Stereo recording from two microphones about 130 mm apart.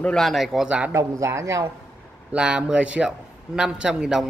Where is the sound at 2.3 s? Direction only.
10° right (ahead or behind).